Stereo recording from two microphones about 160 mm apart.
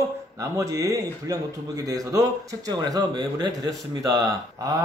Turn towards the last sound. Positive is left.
turn(degrees=-20)  # may be behind; listen again after turning